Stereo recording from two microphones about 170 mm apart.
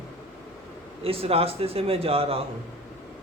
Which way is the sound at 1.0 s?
35° right (ahead or behind).